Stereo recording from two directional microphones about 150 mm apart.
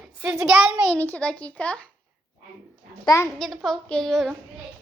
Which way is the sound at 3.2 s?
Centre (ahead or behind).